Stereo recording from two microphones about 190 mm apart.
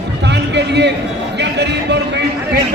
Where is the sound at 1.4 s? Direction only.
65° right (ahead or behind).